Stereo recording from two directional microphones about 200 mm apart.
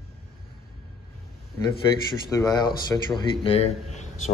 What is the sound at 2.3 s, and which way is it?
Speech, 20° left (ahead or behind).